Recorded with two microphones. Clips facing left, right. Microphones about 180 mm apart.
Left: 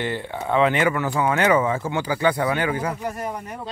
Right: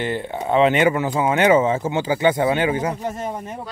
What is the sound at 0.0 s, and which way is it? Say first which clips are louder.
Speech: right 3 dB; 20° right (ahead or behind).